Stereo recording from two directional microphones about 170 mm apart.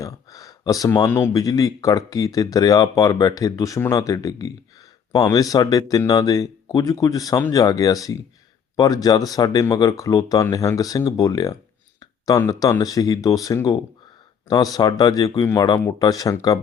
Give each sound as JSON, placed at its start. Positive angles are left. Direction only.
{"t": 0.0, "sound": "speech", "side_deg": 20}